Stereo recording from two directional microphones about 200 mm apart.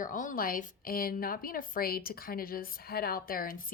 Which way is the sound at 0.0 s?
40° left (ahead or behind).